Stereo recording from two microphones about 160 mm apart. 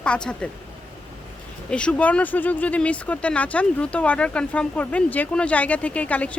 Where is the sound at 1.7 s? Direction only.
5° left (ahead or behind).